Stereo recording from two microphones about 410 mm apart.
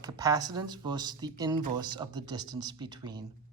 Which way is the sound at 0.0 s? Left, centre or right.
Centre.